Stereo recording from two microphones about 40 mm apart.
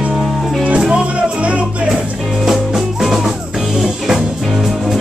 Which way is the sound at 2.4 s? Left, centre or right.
Centre.